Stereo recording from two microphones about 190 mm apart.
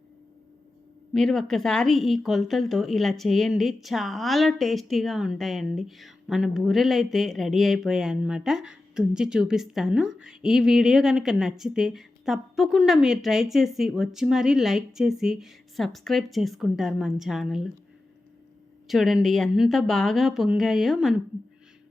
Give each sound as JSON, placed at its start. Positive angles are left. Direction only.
{"t": 1.1, "sound": "speech", "side_deg": 0}
{"t": 18.9, "sound": "speech", "side_deg": 0}